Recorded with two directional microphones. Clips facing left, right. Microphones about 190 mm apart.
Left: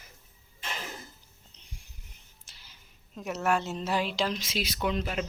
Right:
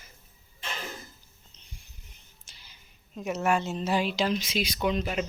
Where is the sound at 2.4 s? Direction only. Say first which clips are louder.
Even; 5° left (ahead or behind).